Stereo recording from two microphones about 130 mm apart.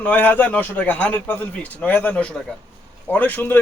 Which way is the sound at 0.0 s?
10° left (ahead or behind).